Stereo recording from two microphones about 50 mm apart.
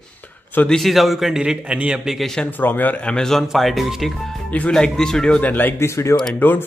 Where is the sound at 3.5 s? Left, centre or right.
Centre.